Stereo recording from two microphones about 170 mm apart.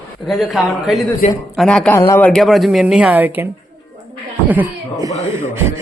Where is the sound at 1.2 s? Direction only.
45° left (ahead or behind).